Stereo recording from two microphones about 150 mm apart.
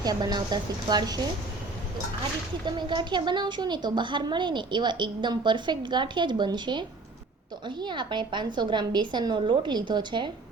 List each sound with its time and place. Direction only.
0.0 s speech: 25° right (ahead or behind)
2.6 s a woman's voice: 30° right (ahead or behind)